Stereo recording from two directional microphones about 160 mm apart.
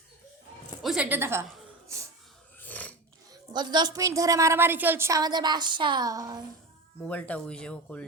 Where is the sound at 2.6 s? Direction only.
10° left (ahead or behind).